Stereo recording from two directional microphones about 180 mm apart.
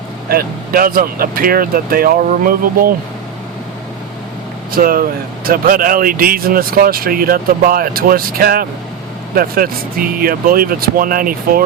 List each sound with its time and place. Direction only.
0.3 s speech: 55° right (ahead or behind)
4.7 s speech: 55° right (ahead or behind)